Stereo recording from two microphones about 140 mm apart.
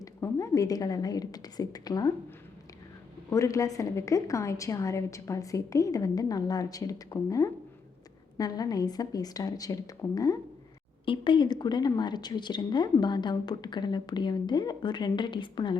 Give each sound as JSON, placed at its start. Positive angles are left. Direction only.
{"t": 0.0, "sound": "a woman's voice", "side_deg": 25}
{"t": 3.2, "sound": "a woman's voice", "side_deg": 20}
{"t": 11.0, "sound": "a woman's voice", "side_deg": 35}